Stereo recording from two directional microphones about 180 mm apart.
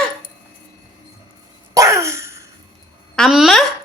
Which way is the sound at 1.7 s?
15° right (ahead or behind).